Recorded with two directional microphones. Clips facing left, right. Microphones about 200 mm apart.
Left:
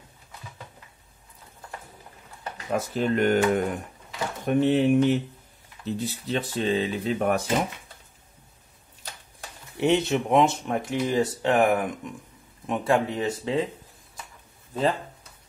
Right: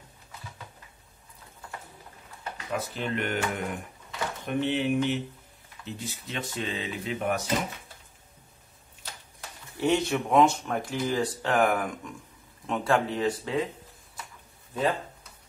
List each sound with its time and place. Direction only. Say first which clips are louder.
2.5 s speech: left 6 dB; 45° left (ahead or behind)
9.8 s speech: left 3 dB; 20° left (ahead or behind)